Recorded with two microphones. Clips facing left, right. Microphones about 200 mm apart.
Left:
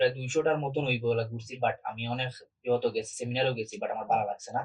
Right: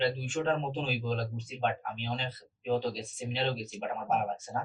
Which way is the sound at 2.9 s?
40° left (ahead or behind).